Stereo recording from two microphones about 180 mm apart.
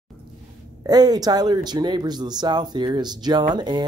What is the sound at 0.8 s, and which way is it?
Speech, 20° right (ahead or behind).